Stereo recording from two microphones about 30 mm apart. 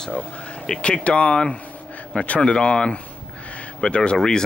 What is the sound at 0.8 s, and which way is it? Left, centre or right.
Speech, left.